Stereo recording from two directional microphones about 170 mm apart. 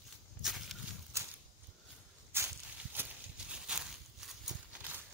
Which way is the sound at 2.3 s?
15° right (ahead or behind).